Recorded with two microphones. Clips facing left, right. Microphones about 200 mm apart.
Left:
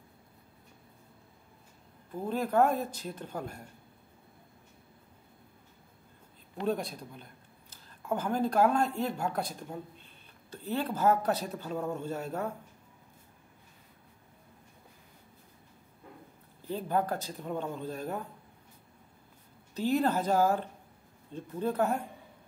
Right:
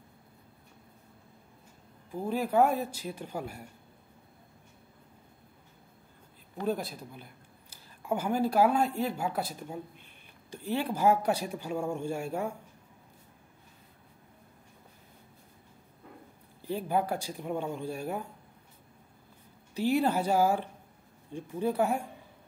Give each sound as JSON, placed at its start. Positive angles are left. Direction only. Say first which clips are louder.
{"t": 2.0, "sound": "speech", "louder": "right 1 dB", "side_deg": -10}
{"t": 6.6, "sound": "speech", "louder": "even", "side_deg": -5}
{"t": 16.6, "sound": "speech", "louder": "right 1 dB", "side_deg": -10}
{"t": 19.7, "sound": "speech", "louder": "right 1 dB", "side_deg": -10}